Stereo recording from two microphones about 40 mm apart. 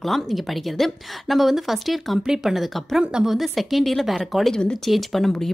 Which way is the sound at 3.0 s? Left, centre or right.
Right.